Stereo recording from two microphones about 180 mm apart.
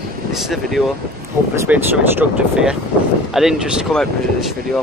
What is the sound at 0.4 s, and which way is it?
Speech, centre (ahead or behind).